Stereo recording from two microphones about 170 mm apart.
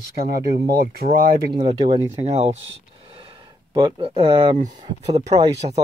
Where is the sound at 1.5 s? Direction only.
35° right (ahead or behind).